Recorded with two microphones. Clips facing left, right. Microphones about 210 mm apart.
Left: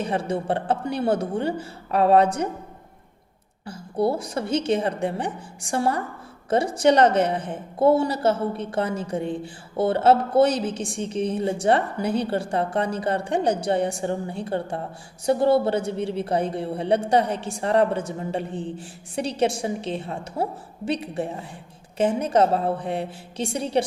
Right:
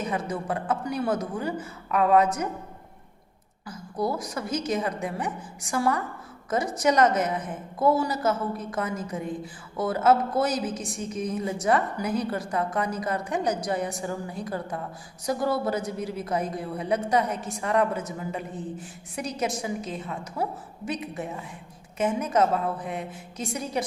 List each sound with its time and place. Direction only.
0.0 s a woman's voice: 30° left (ahead or behind)
3.7 s a woman's voice: 30° left (ahead or behind)